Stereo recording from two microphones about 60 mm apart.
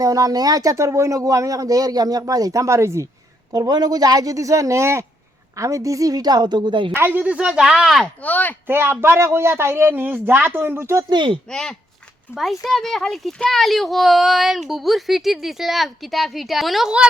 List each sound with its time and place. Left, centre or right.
0.0 s speech: right
3.5 s speech: right
5.5 s a woman's voice: right
6.9 s speech: right
7.2 s speech: right
7.6 s a child's voice: centre
8.0 s speech: left
8.6 s speech: right
11.4 s speech: centre
12.3 s a child's voice: centre